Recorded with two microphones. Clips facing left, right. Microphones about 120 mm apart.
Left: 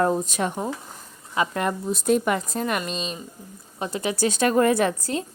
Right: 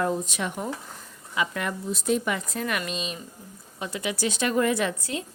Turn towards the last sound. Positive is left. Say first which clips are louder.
# left 5 dB
turn(degrees=40)  # may be behind; listen again after turning